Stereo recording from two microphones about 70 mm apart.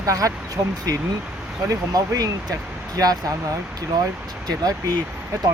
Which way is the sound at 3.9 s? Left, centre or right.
Right.